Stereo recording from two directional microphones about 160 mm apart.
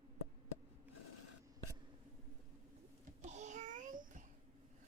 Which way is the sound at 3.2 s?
45° right (ahead or behind).